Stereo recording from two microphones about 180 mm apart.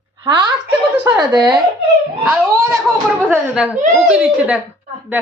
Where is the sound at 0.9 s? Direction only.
15° right (ahead or behind).